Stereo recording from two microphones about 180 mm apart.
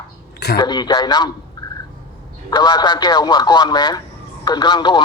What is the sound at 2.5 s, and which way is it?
A man's voice, 20° left (ahead or behind).